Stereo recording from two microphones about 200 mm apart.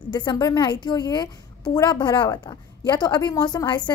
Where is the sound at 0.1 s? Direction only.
20° left (ahead or behind).